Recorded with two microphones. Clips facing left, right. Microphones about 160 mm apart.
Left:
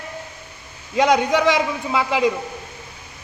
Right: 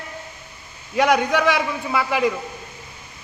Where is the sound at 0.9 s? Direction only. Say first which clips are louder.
Left 1 dB; 20° left (ahead or behind).